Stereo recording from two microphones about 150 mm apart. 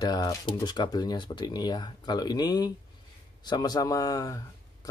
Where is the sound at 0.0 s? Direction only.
25° left (ahead or behind).